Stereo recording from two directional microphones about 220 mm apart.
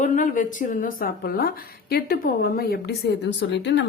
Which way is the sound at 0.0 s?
35° left (ahead or behind).